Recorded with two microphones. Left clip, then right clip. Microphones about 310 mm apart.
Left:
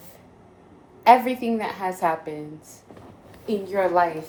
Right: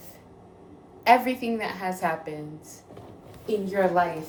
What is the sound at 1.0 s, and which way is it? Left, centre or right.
A woman's voice, centre.